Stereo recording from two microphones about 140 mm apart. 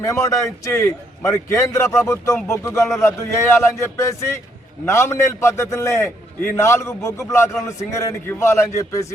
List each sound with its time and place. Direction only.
0.0 s a man's voice: 20° left (ahead or behind)